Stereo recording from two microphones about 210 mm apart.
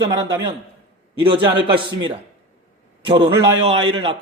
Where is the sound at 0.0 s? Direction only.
20° right (ahead or behind).